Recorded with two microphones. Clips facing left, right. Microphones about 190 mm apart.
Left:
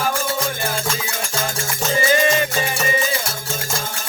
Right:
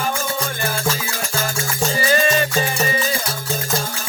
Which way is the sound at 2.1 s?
15° left (ahead or behind).